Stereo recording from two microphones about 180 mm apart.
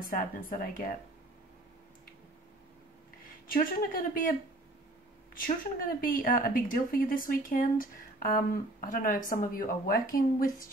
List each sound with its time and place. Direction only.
0.1 s speech: 50° left (ahead or behind)
3.4 s speech: 50° left (ahead or behind)
5.3 s speech: 50° left (ahead or behind)